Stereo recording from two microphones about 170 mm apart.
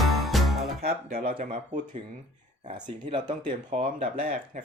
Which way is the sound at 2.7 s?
30° right (ahead or behind).